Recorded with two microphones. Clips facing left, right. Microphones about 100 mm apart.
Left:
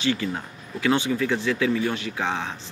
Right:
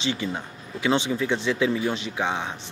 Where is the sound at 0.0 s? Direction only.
20° right (ahead or behind).